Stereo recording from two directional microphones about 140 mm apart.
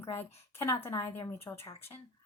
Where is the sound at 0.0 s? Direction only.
15° left (ahead or behind).